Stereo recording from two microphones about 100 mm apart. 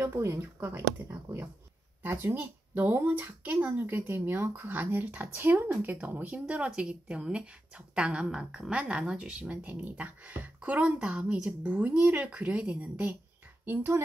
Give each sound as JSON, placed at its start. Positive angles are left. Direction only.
{"t": 0.0, "sound": "speech", "side_deg": -30}
{"t": 2.0, "sound": "speech", "side_deg": -20}
{"t": 13.7, "sound": "speech", "side_deg": -25}